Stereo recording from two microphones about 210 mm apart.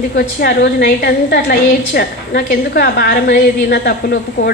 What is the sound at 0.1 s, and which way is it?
A woman's voice, 50° left (ahead or behind).